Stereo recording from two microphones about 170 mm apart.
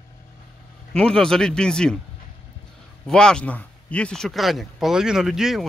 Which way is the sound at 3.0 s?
5° left (ahead or behind).